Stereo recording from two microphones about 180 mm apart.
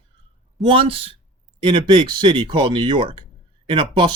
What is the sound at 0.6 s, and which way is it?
Speech, 30° right (ahead or behind).